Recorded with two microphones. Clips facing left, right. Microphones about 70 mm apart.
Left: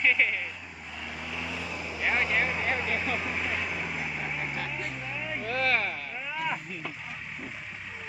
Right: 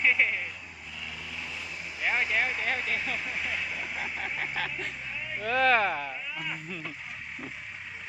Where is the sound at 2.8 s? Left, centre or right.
Left.